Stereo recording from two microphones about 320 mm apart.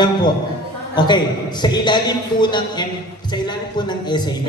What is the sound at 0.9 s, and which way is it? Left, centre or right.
A man's voice, centre.